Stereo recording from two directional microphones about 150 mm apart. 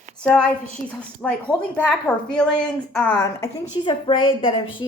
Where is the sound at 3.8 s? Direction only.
35° left (ahead or behind).